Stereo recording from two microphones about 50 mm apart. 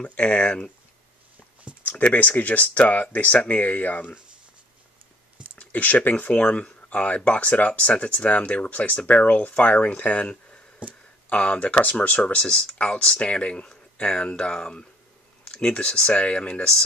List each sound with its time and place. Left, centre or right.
0.1 s speech: left
1.7 s a sound: right
2.1 s speech: left
5.6 s speech: left
10.8 s speech: right
11.2 s speech: left